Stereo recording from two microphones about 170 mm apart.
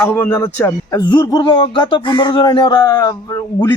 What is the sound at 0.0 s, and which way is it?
Speech, 10° left (ahead or behind).